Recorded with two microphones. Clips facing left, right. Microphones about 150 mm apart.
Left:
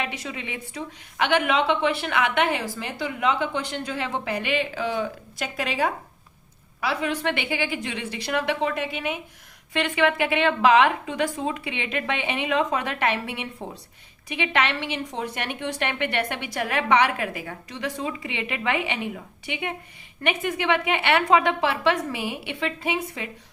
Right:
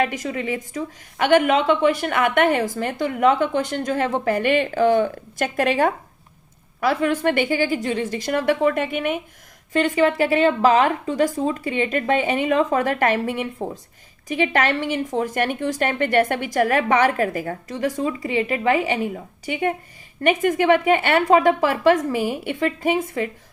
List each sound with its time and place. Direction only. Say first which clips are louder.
0.0 s a woman's voice: right 8 dB; 45° right (ahead or behind)
9.7 s a woman's voice: right 5 dB; 40° right (ahead or behind)